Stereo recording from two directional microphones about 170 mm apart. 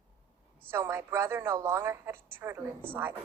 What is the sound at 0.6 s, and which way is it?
A woman's voice, 15° right (ahead or behind).